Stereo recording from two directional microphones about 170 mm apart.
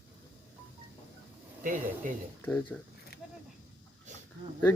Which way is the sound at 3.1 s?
70° left (ahead or behind).